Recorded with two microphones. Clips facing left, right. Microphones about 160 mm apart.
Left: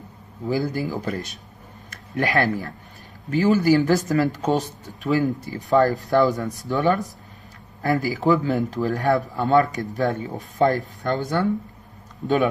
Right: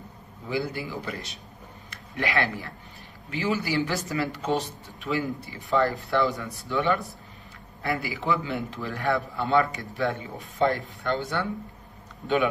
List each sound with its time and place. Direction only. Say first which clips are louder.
0.5 s speech: left 6 dB; 40° left (ahead or behind)